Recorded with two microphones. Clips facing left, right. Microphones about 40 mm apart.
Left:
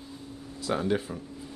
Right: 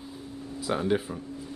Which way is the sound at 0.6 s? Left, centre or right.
Centre.